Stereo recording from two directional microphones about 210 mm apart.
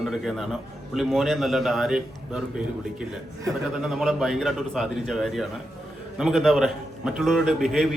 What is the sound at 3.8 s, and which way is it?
A man's voice, centre (ahead or behind).